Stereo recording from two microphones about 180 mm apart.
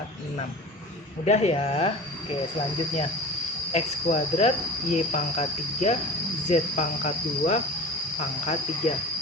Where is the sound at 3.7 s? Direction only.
40° left (ahead or behind).